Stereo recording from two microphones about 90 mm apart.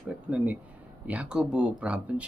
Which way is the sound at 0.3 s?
15° right (ahead or behind).